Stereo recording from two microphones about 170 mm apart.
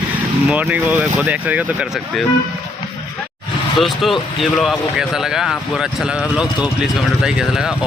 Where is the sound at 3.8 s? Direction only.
Centre (ahead or behind).